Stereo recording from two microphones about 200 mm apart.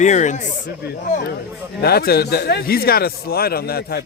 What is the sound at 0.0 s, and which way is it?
Speech, 35° left (ahead or behind).